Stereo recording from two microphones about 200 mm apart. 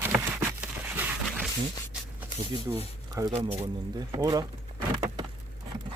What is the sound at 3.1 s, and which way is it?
Speech, 15° right (ahead or behind).